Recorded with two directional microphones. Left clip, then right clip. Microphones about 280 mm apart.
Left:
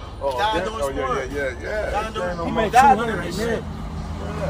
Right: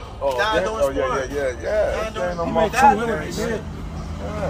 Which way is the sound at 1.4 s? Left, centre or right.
Right.